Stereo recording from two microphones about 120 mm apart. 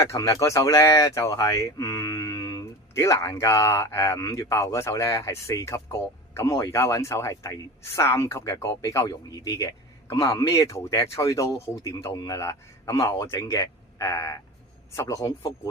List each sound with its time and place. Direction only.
0.0 s speech: 25° left (ahead or behind)